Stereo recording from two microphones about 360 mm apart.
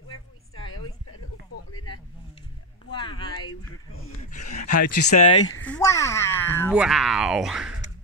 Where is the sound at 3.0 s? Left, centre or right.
Left.